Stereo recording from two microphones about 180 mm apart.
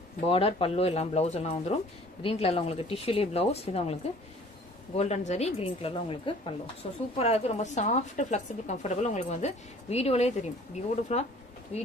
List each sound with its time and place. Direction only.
0.3 s speech: 30° left (ahead or behind)